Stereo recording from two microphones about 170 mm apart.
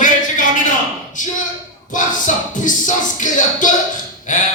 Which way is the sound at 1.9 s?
50° left (ahead or behind).